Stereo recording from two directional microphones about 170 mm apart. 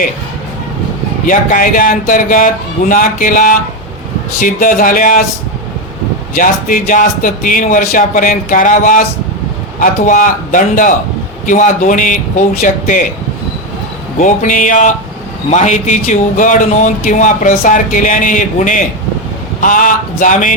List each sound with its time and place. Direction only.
1.3 s speech: 55° left (ahead or behind)
6.3 s speech: 55° left (ahead or behind)
14.2 s speech: 50° left (ahead or behind)